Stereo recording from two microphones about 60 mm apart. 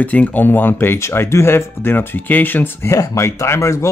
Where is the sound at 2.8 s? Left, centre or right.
Left.